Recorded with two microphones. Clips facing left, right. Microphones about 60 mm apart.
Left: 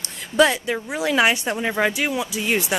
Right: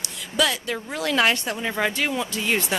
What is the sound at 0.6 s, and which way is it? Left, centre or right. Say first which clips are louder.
Speech: left 3 dB; centre.